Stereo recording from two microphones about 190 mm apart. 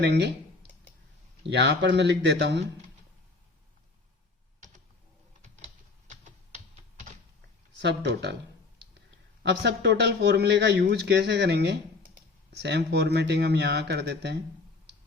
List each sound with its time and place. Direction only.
0.0 s a man's voice: 65° right (ahead or behind)
1.5 s a man's voice: 65° right (ahead or behind)
5.4 s typing: 40° right (ahead or behind)
7.8 s a man's voice: 65° right (ahead or behind)
9.4 s a man's voice: 65° right (ahead or behind)